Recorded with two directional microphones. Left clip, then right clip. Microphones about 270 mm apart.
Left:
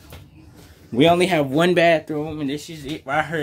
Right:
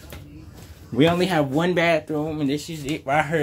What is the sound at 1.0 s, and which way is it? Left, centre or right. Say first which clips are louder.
Speech: left 3 dB; centre.